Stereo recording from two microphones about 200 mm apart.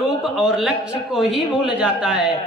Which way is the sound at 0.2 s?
Centre (ahead or behind).